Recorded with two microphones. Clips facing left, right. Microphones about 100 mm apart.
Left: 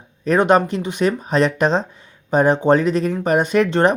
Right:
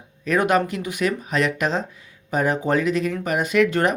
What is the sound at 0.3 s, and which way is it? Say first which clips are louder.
Speech: left 5 dB; 30° left (ahead or behind).